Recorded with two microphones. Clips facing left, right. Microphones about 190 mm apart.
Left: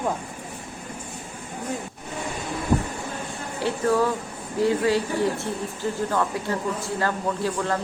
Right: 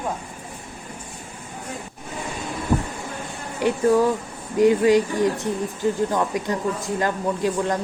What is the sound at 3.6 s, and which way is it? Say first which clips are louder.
Speech: right 4 dB; 15° right (ahead or behind).